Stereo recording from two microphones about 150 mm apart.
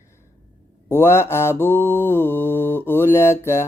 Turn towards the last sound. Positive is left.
turn(degrees=15)  # may be behind; listen again after turning